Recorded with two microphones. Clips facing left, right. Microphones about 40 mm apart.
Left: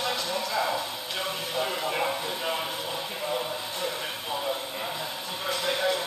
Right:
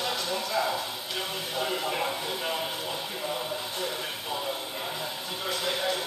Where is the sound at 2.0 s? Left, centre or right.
Centre.